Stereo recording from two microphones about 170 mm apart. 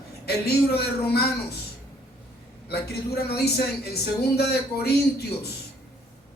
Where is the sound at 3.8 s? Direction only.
70° left (ahead or behind).